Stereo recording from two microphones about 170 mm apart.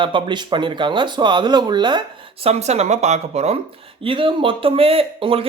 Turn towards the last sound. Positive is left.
turn(degrees=-30)  # may be behind; listen again after turning